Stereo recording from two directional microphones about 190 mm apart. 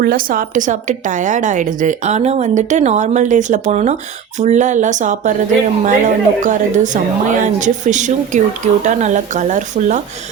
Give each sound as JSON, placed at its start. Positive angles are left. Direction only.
{"t": 0.0, "sound": "a woman's voice", "side_deg": -50}